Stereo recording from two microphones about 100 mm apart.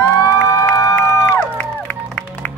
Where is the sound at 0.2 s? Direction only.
35° left (ahead or behind).